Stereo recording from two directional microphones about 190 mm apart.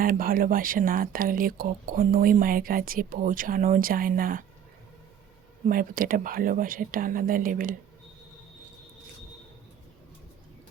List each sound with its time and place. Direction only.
0.0 s speech: 50° right (ahead or behind)
5.6 s speech: 45° right (ahead or behind)